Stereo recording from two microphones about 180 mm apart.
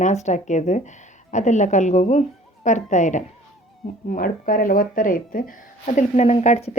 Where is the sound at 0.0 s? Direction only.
40° left (ahead or behind).